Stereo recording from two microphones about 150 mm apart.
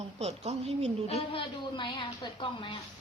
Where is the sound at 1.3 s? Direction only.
35° left (ahead or behind).